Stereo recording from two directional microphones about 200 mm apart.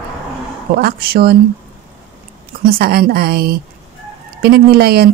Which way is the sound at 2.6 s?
50° right (ahead or behind).